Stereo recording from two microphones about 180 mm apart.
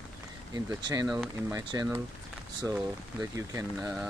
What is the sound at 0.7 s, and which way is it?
Speech, 20° right (ahead or behind).